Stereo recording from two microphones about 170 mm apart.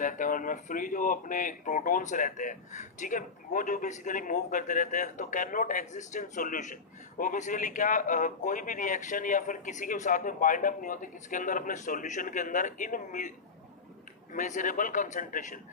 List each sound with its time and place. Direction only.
0.0 s speech: 50° left (ahead or behind)
14.3 s speech: 45° left (ahead or behind)